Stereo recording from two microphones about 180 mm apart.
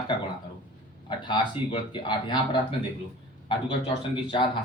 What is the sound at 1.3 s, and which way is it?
Speech, 25° left (ahead or behind).